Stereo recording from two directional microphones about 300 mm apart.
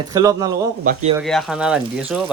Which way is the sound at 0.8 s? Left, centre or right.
Right.